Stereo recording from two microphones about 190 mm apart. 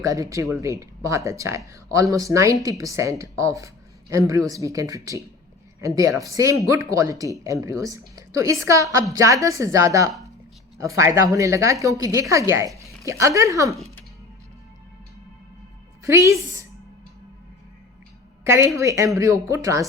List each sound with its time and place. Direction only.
0.0 s speech: 15° right (ahead or behind)
16.0 s speech: 15° right (ahead or behind)
18.4 s speech: 15° right (ahead or behind)